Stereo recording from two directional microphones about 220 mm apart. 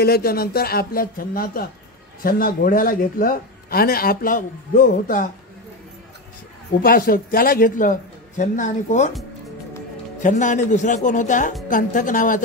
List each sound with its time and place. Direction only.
0.0 s a man's voice: 45° left (ahead or behind)
6.8 s a man's voice: 40° left (ahead or behind)
10.2 s a man's voice: 35° left (ahead or behind)